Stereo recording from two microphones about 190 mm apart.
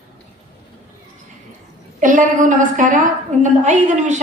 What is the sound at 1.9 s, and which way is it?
A woman's voice, 45° right (ahead or behind).